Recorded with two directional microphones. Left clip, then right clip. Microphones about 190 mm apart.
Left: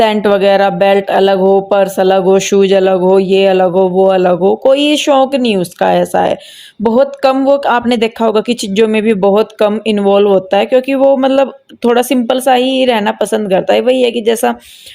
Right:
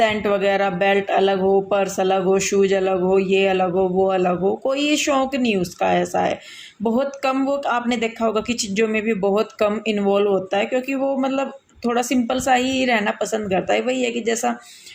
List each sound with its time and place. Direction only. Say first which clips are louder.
0.0 s speech: left 9 dB; 40° left (ahead or behind)